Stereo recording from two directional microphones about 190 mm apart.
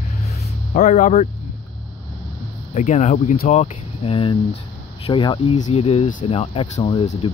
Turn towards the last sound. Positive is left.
turn(degrees=30)  # may be behind; listen again after turning